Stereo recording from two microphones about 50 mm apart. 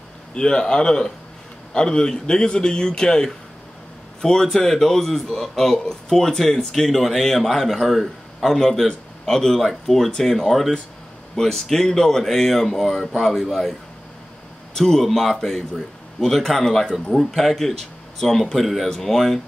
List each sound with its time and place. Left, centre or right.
0.3 s a man's voice: centre
14.8 s a man's voice: centre
17.1 s a man's voice: centre